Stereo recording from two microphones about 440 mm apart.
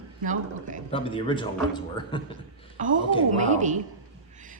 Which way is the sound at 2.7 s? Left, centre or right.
Centre.